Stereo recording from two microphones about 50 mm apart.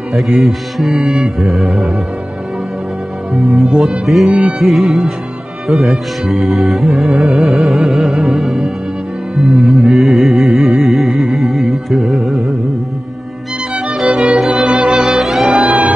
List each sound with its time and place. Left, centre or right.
0.1 s music: centre
3.3 s music: centre
4.3 s music: right
4.6 s music: centre
13.7 s music: centre
15.0 s music: centre
15.5 s music: right